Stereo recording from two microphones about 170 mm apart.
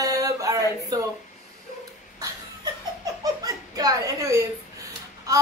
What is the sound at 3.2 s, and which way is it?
Chuckle, 20° right (ahead or behind).